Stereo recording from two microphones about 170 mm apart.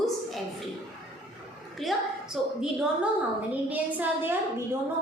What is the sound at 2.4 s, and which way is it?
Speech, 5° right (ahead or behind).